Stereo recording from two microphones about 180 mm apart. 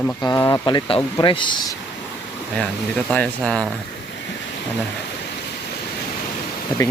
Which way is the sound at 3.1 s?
5° left (ahead or behind).